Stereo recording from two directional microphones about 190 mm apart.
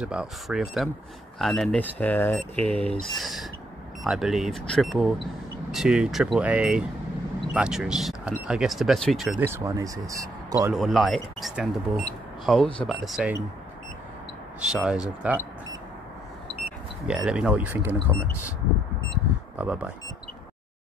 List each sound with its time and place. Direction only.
0.0 s speech: 5° right (ahead or behind)
9.4 s speech: 15° right (ahead or behind)
10.7 s speech: centre (ahead or behind)
14.7 s speech: 5° right (ahead or behind)
17.1 s speech: 5° right (ahead or behind)
19.6 s speech: 5° right (ahead or behind)